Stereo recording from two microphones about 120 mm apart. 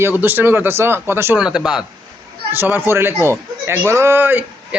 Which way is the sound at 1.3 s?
10° right (ahead or behind).